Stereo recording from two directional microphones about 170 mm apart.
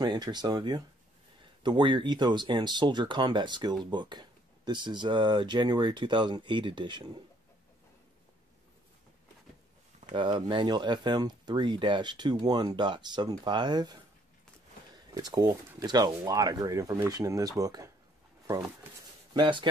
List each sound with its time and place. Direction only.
0.0 s speech: 25° right (ahead or behind)
10.1 s speech: 30° right (ahead or behind)
15.1 s speech: 25° right (ahead or behind)
19.3 s speech: 25° right (ahead or behind)